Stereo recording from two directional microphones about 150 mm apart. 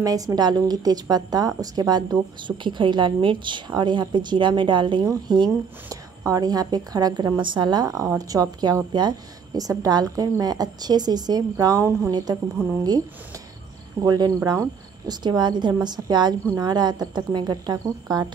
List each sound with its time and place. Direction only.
0.0 s a woman's voice: 25° right (ahead or behind)
14.0 s a woman's voice: 25° right (ahead or behind)